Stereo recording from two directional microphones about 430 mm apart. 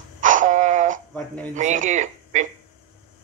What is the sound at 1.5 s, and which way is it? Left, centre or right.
Speech, centre.